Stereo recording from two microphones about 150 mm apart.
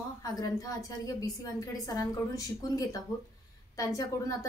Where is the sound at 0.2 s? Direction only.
20° left (ahead or behind).